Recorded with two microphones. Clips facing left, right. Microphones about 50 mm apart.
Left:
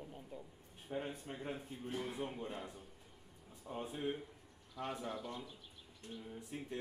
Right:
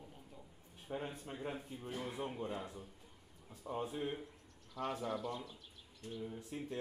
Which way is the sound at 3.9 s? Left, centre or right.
Centre.